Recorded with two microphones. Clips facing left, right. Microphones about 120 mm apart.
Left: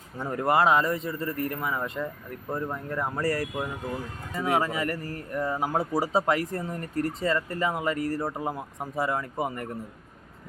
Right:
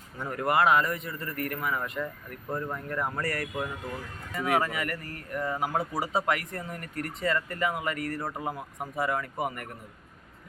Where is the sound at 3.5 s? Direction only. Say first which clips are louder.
Left 2 dB; 15° left (ahead or behind).